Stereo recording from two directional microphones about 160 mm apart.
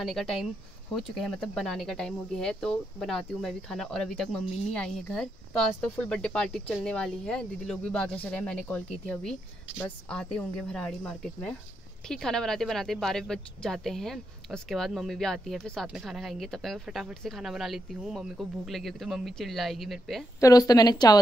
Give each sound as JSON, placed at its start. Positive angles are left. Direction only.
{"t": 0.0, "sound": "speech", "side_deg": 0}
{"t": 20.3, "sound": "a woman's voice", "side_deg": 20}